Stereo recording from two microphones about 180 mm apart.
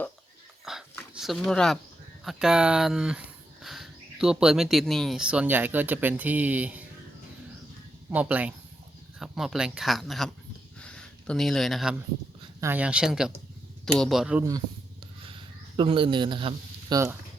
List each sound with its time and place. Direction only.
0.6 s dog: centre (ahead or behind)
1.1 s speech: centre (ahead or behind)
8.1 s speech: 10° right (ahead or behind)
10.8 s a sound: 5° left (ahead or behind)
12.5 s speech: 10° right (ahead or behind)
15.2 s a sound: 30° right (ahead or behind)